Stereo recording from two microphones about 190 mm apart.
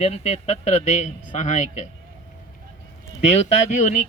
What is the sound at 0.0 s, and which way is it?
A man's voice, 35° left (ahead or behind).